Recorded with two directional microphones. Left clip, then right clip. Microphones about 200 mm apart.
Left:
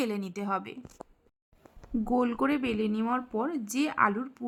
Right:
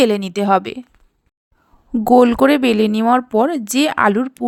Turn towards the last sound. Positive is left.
turn(degrees=-45)  # may be behind; listen again after turning